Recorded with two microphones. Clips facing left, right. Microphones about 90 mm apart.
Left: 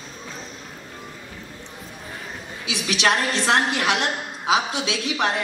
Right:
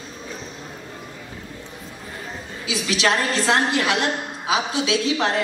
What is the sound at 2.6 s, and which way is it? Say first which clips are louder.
Speech: right 1 dB; 20° left (ahead or behind).